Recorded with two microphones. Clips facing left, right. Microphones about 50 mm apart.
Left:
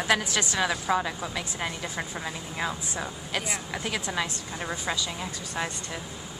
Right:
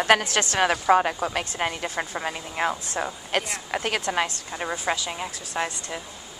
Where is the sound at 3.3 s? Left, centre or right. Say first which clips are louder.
Right 5 dB; right.